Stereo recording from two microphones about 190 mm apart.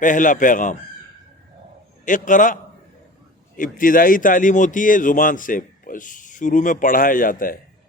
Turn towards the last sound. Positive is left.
turn(degrees=45)  # may be behind; listen again after turning